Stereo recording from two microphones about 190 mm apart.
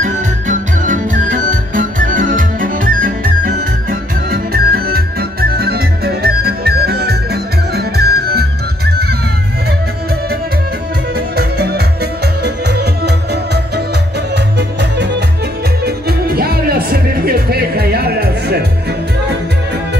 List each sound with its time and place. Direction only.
0.0 s music: 40° right (ahead or behind)
11.1 s music: 60° right (ahead or behind)